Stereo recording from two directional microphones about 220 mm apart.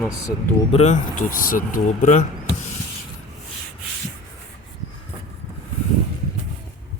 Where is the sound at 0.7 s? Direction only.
30° left (ahead or behind).